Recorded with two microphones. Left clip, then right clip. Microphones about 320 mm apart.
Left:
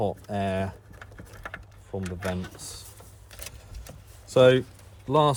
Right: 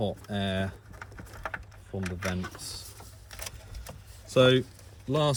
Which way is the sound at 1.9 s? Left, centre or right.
Left.